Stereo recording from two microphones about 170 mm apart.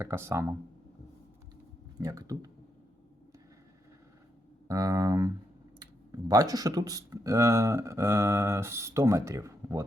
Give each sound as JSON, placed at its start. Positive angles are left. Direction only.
{"t": 0.0, "sound": "speech", "side_deg": -15}
{"t": 2.0, "sound": "speech", "side_deg": -20}
{"t": 4.7, "sound": "speech", "side_deg": -20}